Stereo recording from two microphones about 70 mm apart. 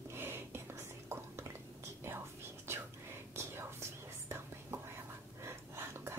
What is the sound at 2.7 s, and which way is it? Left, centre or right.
Whispering, right.